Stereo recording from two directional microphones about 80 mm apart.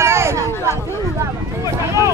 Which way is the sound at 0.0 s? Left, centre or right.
Right.